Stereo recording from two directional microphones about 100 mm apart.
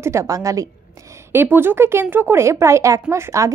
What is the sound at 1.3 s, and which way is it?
A woman's voice, 20° right (ahead or behind).